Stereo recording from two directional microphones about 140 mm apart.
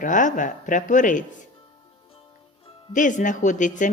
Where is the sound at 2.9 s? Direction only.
65° left (ahead or behind).